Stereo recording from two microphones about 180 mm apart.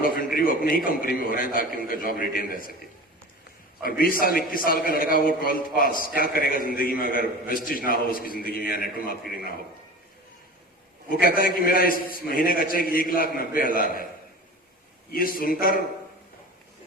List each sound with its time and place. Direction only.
0.0 s a sound: 50° left (ahead or behind)
0.9 s a man's voice: 55° left (ahead or behind)
3.8 s a man's voice: 55° left (ahead or behind)
11.2 s a man's voice: 55° left (ahead or behind)
15.1 s a man's voice: 50° left (ahead or behind)